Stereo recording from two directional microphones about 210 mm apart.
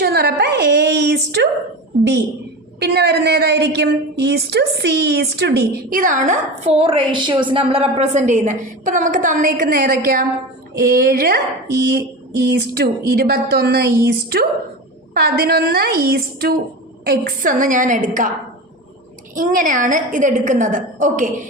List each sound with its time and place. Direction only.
0.0 s a sound: 50° right (ahead or behind)
2.8 s a woman's voice: 50° right (ahead or behind)
12.5 s a woman's voice: 50° right (ahead or behind)
19.4 s a woman's voice: 40° right (ahead or behind)